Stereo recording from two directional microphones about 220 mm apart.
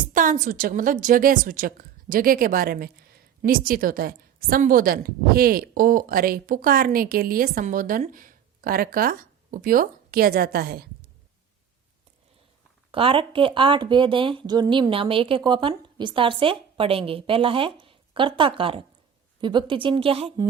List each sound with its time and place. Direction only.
0.0 s a woman's voice: 35° right (ahead or behind)
12.9 s speech: 25° right (ahead or behind)